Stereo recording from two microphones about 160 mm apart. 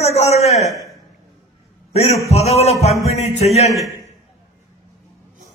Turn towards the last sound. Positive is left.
turn(degrees=40)  # may be behind; listen again after turning